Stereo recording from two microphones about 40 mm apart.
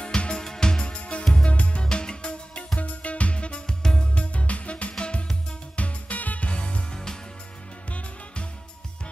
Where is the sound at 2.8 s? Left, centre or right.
Left.